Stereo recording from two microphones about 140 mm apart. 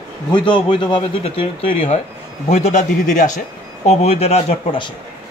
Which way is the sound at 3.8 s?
50° left (ahead or behind).